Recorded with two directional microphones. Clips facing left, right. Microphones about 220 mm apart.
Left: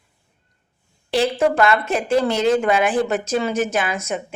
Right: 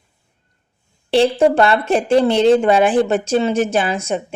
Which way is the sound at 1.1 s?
30° right (ahead or behind).